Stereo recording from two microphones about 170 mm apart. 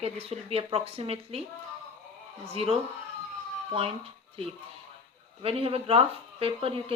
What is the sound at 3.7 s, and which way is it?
Speech, 35° right (ahead or behind).